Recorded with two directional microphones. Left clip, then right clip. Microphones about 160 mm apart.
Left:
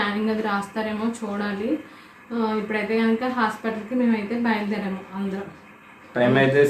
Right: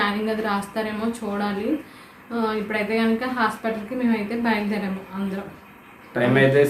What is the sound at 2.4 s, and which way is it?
A woman's voice, 15° right (ahead or behind).